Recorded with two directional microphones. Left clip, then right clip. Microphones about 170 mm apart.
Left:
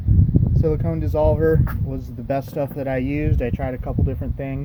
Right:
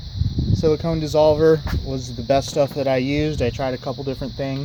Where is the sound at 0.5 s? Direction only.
40° right (ahead or behind).